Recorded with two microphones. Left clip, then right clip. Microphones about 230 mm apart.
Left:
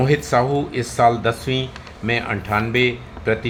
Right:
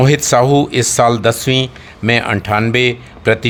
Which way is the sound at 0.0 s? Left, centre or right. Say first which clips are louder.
Right 6 dB; right.